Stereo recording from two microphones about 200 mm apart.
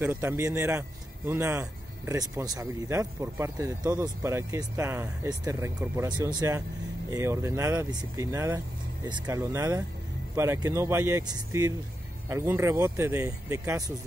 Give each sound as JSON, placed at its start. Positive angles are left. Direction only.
{"t": 0.0, "sound": "a man's voice", "side_deg": -10}